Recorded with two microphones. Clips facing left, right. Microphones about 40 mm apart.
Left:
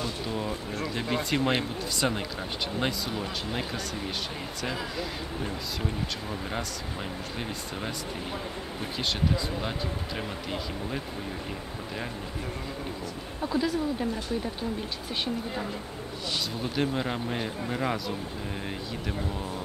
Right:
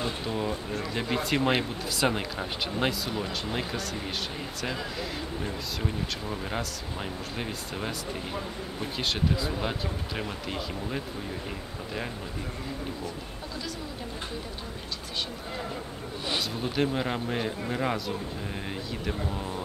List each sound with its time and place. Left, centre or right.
0.3 s speech: centre
8.9 s speech: centre
13.5 s speech: left
16.7 s speech: centre